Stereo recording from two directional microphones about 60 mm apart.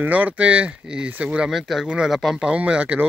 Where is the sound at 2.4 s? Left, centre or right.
Centre.